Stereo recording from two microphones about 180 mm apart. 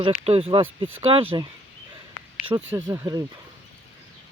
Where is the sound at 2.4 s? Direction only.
30° right (ahead or behind).